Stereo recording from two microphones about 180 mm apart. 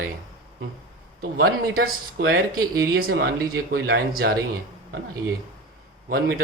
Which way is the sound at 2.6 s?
20° right (ahead or behind).